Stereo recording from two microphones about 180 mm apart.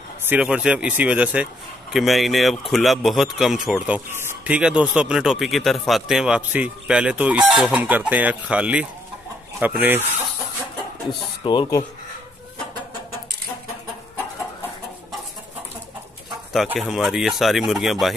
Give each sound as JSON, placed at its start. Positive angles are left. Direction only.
{"t": 0.3, "sound": "speech", "side_deg": -5}
{"t": 11.4, "sound": "speech", "side_deg": 25}
{"t": 16.5, "sound": "speech", "side_deg": 0}